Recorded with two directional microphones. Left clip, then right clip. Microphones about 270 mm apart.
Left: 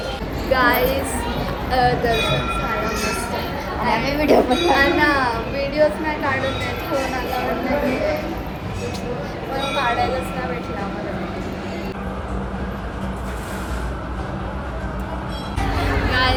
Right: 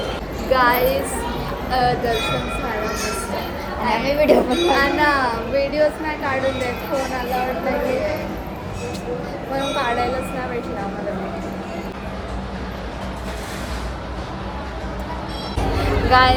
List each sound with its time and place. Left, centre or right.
0.5 s child singing: centre
1.7 s speech: centre
3.8 s speech: centre
9.7 s speech: centre
15.7 s vehicle: centre